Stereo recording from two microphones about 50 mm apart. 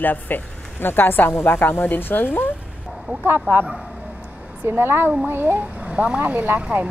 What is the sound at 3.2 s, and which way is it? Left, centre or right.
Speech, right.